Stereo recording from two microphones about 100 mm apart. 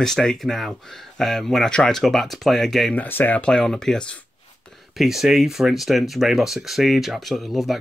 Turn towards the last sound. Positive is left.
turn(degrees=0)  # may be behind; listen again after turning